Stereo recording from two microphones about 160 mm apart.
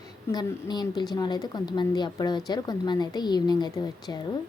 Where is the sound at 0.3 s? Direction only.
25° left (ahead or behind).